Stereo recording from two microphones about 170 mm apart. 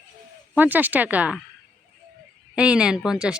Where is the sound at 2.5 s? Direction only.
5° right (ahead or behind).